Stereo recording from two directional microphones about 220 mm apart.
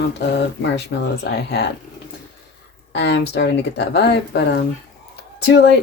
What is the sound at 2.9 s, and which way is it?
Speech, 55° left (ahead or behind).